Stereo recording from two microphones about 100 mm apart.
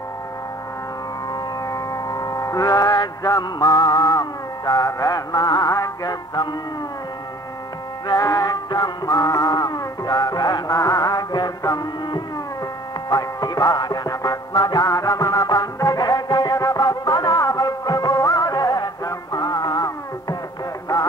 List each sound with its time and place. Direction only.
1.7 s music: 35° left (ahead or behind)
8.1 s music: 35° left (ahead or behind)